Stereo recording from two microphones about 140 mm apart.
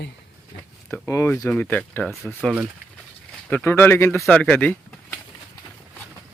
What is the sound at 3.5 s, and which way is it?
Speech, 15° left (ahead or behind).